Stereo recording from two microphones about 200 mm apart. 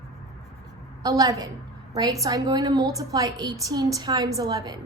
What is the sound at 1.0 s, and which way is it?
A woman's voice, 15° right (ahead or behind).